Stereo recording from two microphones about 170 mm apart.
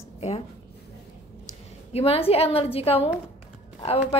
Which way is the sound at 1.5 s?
35° left (ahead or behind).